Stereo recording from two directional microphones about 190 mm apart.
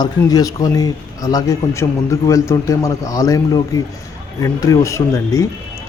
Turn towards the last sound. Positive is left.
turn(degrees=15)  # may be behind; listen again after turning